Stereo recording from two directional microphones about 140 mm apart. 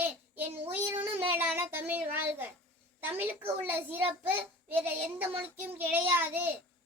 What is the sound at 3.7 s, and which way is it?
Child singing, 15° right (ahead or behind).